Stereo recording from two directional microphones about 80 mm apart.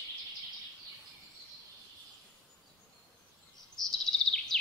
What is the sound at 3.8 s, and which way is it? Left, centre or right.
Chirp, centre.